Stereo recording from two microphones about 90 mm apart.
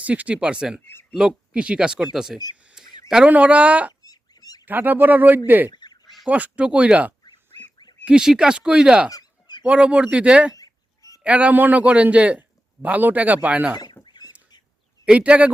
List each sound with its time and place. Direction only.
0.0 s a man's voice: 15° right (ahead or behind)
2.6 s a sound: 15° right (ahead or behind)
3.1 s a man's voice: 10° right (ahead or behind)
4.0 s duck: 45° left (ahead or behind)
4.6 s speech: 20° right (ahead or behind)
5.7 s duck: 55° left (ahead or behind)
6.2 s a man's voice: 15° right (ahead or behind)
10.5 s a sound: 40° left (ahead or behind)
11.2 s a man's voice: 15° right (ahead or behind)
14.0 s a sound: 50° left (ahead or behind)
15.0 s a man's voice: 10° right (ahead or behind)